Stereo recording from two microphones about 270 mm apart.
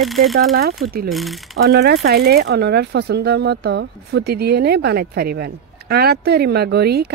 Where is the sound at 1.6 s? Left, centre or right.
Right.